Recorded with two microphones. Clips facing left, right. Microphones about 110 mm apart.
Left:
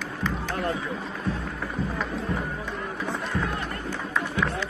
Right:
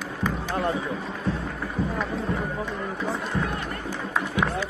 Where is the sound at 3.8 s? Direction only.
10° right (ahead or behind).